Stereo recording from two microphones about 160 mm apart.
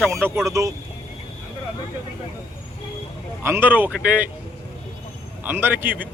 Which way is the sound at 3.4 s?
15° right (ahead or behind).